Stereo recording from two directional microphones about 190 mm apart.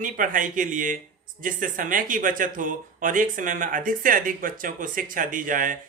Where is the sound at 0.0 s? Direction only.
45° right (ahead or behind).